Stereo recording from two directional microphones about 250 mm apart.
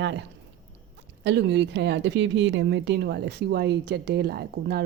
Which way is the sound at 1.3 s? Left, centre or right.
Right.